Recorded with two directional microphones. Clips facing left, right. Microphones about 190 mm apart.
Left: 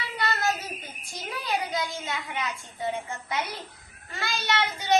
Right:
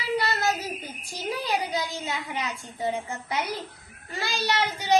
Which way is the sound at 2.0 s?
35° right (ahead or behind).